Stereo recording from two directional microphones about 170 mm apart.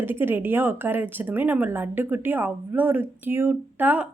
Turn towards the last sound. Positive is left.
turn(degrees=-10)  # may be behind; listen again after turning